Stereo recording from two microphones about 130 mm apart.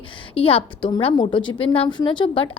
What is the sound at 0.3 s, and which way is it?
A woman's voice, 45° left (ahead or behind).